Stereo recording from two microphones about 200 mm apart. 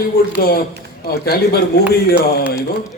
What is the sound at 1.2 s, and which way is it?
Speech, 50° left (ahead or behind).